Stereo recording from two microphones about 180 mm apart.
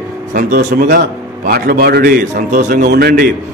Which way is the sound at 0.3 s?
50° right (ahead or behind).